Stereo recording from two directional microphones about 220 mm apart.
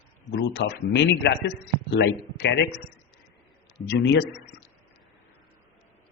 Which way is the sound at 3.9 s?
50° left (ahead or behind).